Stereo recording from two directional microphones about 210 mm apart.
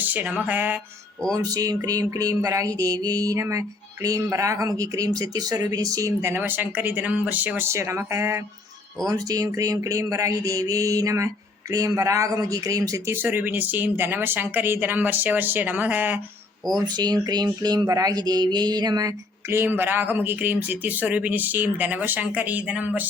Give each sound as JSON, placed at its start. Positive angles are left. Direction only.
{"t": 0.0, "sound": "speech", "side_deg": -10}
{"t": 16.7, "sound": "speech", "side_deg": -20}